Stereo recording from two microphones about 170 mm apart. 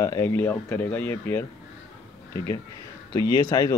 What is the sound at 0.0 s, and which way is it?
Speech, 15° left (ahead or behind).